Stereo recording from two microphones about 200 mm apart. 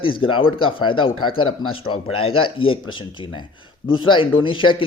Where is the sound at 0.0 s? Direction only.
25° left (ahead or behind).